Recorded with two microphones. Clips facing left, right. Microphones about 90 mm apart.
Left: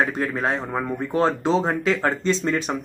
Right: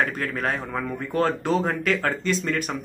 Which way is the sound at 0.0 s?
20° left (ahead or behind).